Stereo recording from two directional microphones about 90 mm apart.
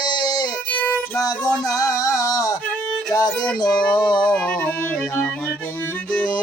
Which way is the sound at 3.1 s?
45° left (ahead or behind).